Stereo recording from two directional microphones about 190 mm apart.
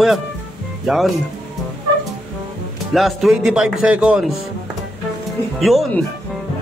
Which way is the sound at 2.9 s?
Centre (ahead or behind).